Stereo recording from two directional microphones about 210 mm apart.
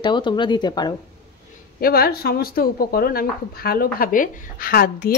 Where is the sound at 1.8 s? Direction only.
45° left (ahead or behind).